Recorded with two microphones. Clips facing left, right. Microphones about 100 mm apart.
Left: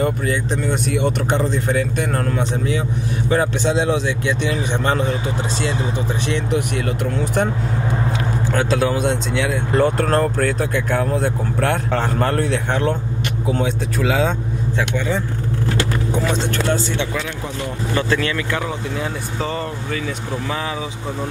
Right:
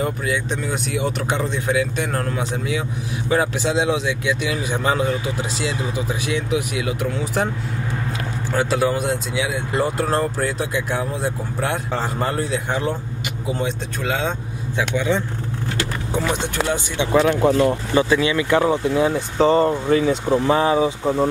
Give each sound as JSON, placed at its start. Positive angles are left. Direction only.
{"t": 0.0, "sound": "speech", "side_deg": 0}
{"t": 8.5, "sound": "speech", "side_deg": -5}
{"t": 14.8, "sound": "speech", "side_deg": -10}
{"t": 16.3, "sound": "speech", "side_deg": -15}
{"t": 17.2, "sound": "speech", "side_deg": -50}
{"t": 17.9, "sound": "speech", "side_deg": -15}
{"t": 19.5, "sound": "speech", "side_deg": -30}